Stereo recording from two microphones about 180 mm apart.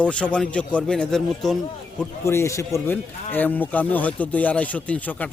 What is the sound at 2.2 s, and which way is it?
Speech, 15° left (ahead or behind).